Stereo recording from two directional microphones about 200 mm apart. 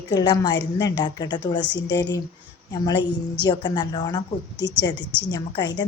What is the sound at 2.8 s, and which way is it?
A woman's voice, 20° left (ahead or behind).